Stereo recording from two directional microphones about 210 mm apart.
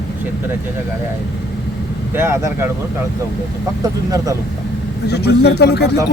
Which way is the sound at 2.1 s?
10° right (ahead or behind).